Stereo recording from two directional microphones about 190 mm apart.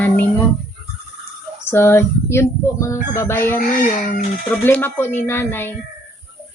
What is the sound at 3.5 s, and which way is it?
Speech, 50° left (ahead or behind).